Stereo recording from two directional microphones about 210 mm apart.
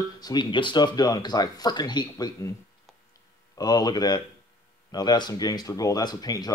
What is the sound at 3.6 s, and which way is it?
Speech, 20° left (ahead or behind).